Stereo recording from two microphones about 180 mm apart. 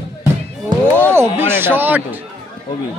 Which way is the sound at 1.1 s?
15° right (ahead or behind).